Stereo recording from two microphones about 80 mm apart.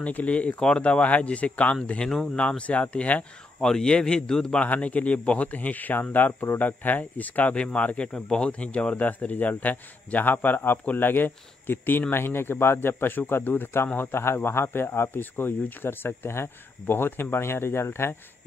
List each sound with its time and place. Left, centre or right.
0.0 s speech: centre
2.0 s a man's voice: centre; by 18.1 s left